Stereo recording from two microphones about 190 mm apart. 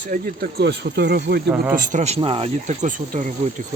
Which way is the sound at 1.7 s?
40° right (ahead or behind).